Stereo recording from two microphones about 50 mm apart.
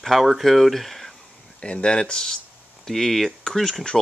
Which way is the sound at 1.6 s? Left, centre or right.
Left.